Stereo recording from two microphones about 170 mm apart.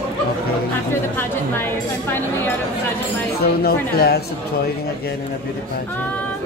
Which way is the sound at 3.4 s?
65° left (ahead or behind).